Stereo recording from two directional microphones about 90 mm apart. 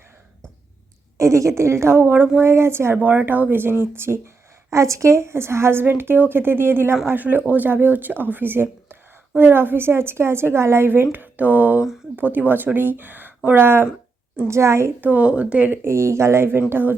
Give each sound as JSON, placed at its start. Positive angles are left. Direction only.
{"t": 1.2, "sound": "a woman's voice", "side_deg": -35}
{"t": 15.0, "sound": "speech", "side_deg": -15}